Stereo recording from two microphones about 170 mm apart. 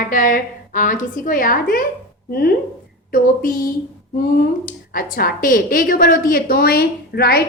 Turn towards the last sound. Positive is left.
turn(degrees=65)  # may be behind; listen again after turning